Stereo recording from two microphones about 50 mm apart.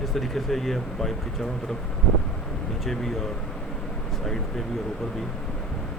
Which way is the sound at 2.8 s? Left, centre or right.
Centre.